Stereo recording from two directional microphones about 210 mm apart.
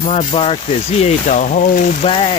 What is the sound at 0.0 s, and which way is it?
Speech, 30° left (ahead or behind).